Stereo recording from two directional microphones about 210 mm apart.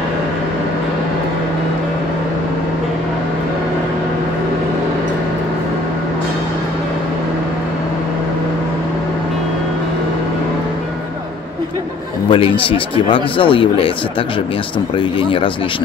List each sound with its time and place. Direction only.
12.3 s a man's voice: 25° left (ahead or behind)
15.0 s a man's voice: 25° left (ahead or behind)